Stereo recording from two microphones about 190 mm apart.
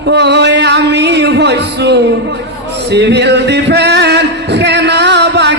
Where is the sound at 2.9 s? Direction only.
65° right (ahead or behind).